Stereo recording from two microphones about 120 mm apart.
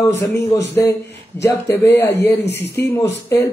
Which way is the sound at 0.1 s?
20° left (ahead or behind).